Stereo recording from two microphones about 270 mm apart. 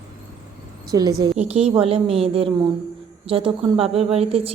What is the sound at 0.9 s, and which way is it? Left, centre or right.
Speech, centre.